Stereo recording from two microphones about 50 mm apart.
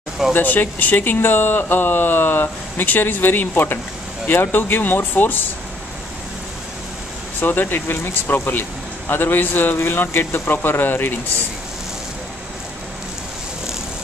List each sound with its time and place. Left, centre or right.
0.3 s speech: left
7.3 s speech: left